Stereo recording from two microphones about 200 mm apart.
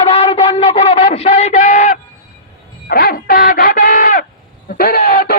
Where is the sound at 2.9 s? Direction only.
45° left (ahead or behind).